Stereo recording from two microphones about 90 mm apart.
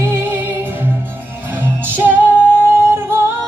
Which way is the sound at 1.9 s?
20° right (ahead or behind).